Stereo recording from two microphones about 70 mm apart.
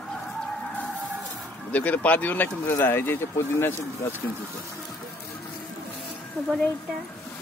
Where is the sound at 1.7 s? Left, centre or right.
Left.